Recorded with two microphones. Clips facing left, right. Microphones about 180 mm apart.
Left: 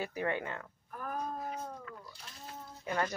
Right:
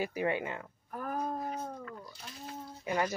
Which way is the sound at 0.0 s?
10° right (ahead or behind).